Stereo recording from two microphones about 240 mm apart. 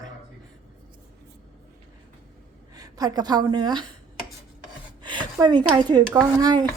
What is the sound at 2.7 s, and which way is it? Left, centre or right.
A woman's voice, centre.